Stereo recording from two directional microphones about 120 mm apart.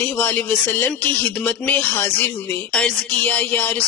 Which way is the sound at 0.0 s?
15° left (ahead or behind).